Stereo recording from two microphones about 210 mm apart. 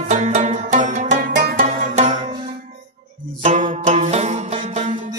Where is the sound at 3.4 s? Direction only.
30° right (ahead or behind).